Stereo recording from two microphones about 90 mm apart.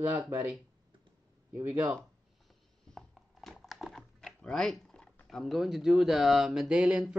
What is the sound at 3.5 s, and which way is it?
Dog, centre (ahead or behind).